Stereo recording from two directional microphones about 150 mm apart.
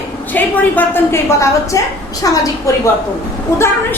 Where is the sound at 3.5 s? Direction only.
15° left (ahead or behind).